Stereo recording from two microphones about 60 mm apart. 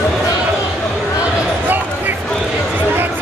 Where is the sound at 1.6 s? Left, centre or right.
Right.